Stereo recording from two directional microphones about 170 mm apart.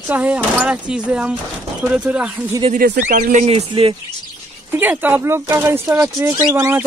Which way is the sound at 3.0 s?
50° right (ahead or behind).